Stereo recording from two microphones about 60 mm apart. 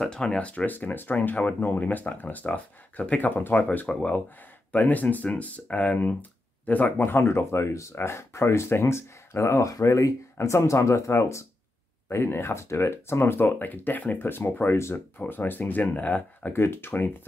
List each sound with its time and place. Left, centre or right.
0.0 s speech: centre; by 3.6 s left
3.9 s speech: centre
4.7 s speech: left
10.3 s speech: left
16.5 s speech: left